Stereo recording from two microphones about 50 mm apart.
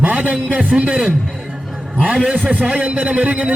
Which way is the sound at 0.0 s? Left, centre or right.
Right.